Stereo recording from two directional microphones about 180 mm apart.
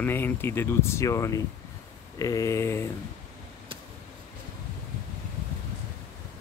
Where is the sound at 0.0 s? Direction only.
10° left (ahead or behind).